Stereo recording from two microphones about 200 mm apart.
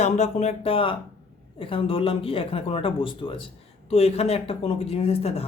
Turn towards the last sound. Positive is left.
turn(degrees=30)  # may be behind; listen again after turning